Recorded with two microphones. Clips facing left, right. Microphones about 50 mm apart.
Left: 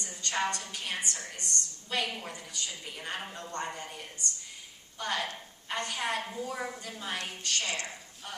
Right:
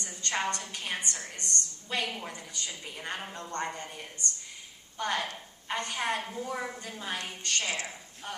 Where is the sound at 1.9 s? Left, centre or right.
Right.